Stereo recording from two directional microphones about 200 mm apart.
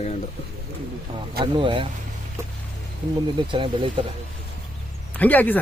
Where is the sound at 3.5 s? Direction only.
25° right (ahead or behind).